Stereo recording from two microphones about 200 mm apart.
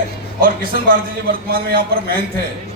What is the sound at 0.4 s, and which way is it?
A man's voice, 45° right (ahead or behind).